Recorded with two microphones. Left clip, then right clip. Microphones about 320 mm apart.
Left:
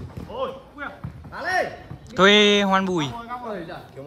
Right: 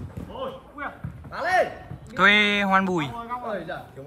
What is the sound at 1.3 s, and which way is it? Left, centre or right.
Speech, right.